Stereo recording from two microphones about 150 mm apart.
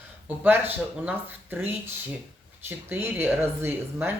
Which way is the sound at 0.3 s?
15° right (ahead or behind).